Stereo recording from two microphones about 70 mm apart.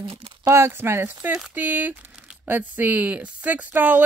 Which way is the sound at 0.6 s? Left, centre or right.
Right.